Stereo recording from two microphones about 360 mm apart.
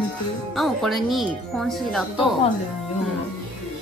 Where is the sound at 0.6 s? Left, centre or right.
Centre.